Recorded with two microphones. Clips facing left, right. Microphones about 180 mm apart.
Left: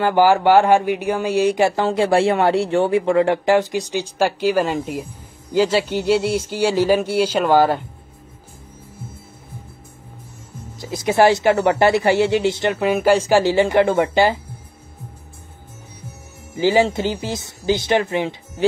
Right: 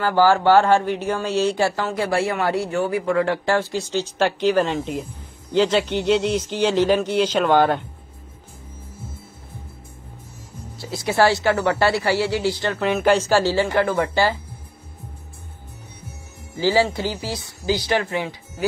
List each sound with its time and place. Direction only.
0.0 s speech: 15° left (ahead or behind)
10.8 s speech: 20° left (ahead or behind)
12.8 s speech: 5° left (ahead or behind)
16.5 s speech: 20° left (ahead or behind)